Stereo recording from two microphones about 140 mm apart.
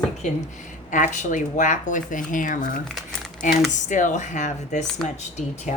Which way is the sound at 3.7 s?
60° left (ahead or behind).